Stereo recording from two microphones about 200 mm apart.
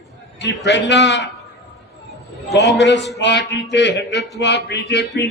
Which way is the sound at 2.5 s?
60° left (ahead or behind).